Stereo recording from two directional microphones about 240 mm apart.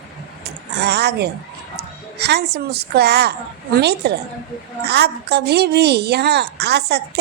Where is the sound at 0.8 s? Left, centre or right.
Right.